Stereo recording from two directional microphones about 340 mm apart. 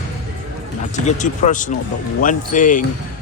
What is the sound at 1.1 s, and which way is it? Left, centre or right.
Speech, left.